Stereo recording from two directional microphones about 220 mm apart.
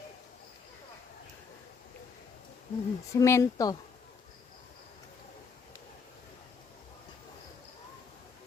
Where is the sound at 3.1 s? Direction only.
15° left (ahead or behind).